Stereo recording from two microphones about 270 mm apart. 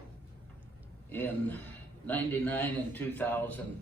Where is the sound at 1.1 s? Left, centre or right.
Centre.